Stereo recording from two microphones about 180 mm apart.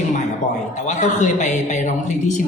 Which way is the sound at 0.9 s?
40° left (ahead or behind).